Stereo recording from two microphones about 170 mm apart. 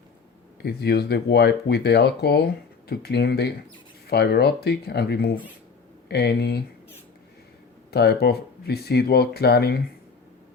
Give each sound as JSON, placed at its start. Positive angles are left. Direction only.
{"t": 0.6, "sound": "speech", "side_deg": 70}
{"t": 7.9, "sound": "speech", "side_deg": 70}